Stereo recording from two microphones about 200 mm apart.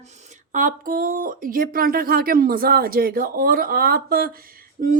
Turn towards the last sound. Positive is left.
turn(degrees=-45)  # may be behind; listen again after turning